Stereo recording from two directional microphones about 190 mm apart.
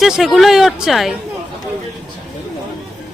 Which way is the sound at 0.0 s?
Centre (ahead or behind).